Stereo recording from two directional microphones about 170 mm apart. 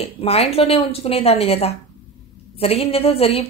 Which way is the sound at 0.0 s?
35° left (ahead or behind).